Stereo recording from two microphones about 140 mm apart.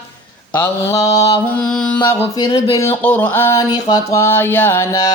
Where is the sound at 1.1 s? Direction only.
50° left (ahead or behind).